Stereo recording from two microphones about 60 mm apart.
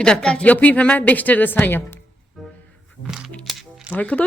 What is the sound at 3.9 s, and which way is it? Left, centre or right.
Speech, left.